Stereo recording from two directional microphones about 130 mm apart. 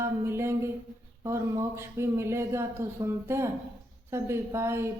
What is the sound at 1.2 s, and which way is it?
Speech, 20° right (ahead or behind).